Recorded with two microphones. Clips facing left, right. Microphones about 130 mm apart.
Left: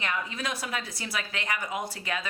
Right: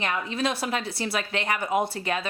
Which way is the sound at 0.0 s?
30° right (ahead or behind).